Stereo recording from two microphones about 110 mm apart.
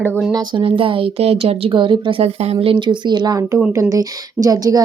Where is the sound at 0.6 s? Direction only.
55° right (ahead or behind).